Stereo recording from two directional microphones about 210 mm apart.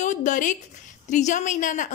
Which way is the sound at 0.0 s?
35° left (ahead or behind).